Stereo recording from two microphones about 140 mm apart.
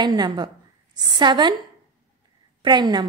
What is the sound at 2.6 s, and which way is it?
Speech, 30° right (ahead or behind).